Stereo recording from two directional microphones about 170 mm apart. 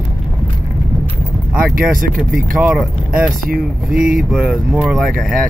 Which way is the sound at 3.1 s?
55° right (ahead or behind).